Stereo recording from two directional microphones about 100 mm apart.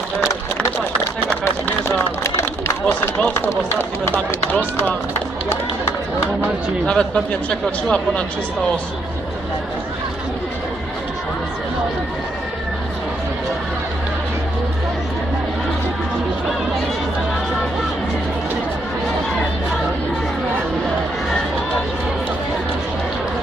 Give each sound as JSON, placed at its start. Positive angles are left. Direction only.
{"t": 1.9, "sound": "a sound", "side_deg": 30}
{"t": 2.8, "sound": "speech", "side_deg": 10}
{"t": 3.3, "sound": "speech", "side_deg": 25}
{"t": 5.5, "sound": "speech", "side_deg": 25}
{"t": 6.8, "sound": "speech", "side_deg": 10}